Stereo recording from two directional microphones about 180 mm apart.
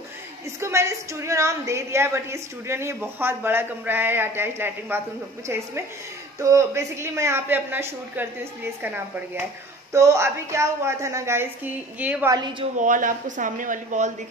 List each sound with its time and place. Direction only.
0.6 s a woman's voice: 15° right (ahead or behind)
12.3 s speech: 25° right (ahead or behind)
12.7 s speech: 45° right (ahead or behind)